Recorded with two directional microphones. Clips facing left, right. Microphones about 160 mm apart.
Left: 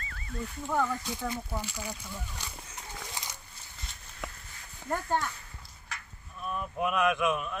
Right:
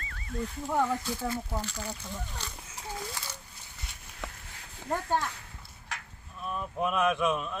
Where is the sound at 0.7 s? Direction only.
20° right (ahead or behind).